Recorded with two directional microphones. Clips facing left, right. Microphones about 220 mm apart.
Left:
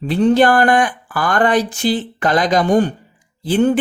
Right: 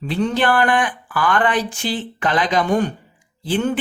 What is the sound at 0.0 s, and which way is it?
Speech, 35° left (ahead or behind).